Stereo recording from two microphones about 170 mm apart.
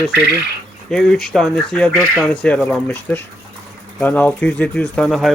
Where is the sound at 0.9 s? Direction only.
5° left (ahead or behind).